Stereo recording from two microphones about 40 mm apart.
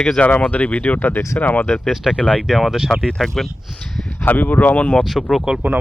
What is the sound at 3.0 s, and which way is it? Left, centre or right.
Speech, centre.